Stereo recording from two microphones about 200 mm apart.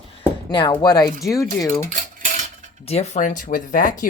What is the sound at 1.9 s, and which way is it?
Cutlery, 40° right (ahead or behind).